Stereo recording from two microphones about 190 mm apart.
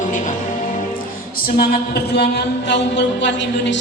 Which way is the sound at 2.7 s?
70° left (ahead or behind).